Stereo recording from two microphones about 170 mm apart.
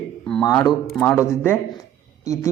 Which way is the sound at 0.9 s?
15° left (ahead or behind).